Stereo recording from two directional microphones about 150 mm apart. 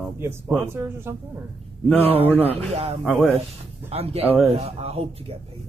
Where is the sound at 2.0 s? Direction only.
40° right (ahead or behind).